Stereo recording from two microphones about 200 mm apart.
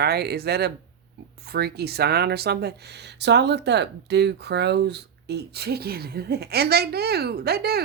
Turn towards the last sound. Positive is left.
turn(degrees=-55)  # may be behind; listen again after turning